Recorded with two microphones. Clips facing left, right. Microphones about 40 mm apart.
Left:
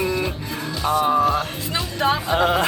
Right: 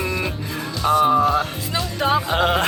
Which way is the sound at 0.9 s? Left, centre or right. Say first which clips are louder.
Right 2 dB; centre.